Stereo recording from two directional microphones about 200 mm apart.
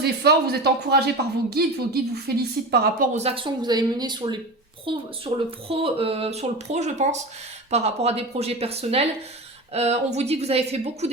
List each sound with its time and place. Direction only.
0.0 s speech: 55° right (ahead or behind)
3.2 s speech: 30° right (ahead or behind)